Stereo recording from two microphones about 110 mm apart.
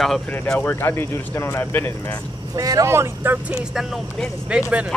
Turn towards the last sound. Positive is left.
turn(degrees=-10)  # may be behind; listen again after turning